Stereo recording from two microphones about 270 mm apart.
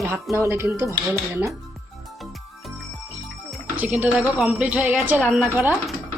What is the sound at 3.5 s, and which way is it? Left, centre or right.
Speech, centre.